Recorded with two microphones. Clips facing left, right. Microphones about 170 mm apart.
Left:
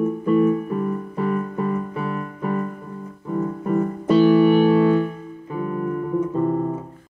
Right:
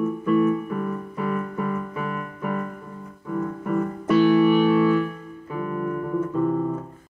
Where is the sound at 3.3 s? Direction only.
35° left (ahead or behind).